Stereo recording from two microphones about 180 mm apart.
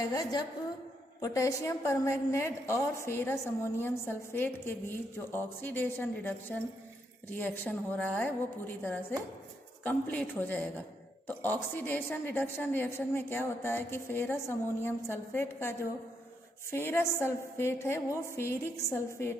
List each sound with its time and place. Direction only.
0.1 s a woman's voice: 20° left (ahead or behind)